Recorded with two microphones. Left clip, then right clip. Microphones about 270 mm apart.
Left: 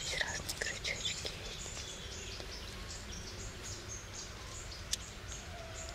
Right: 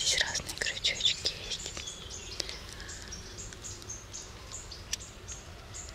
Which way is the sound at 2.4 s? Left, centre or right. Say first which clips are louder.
Right 9 dB; right.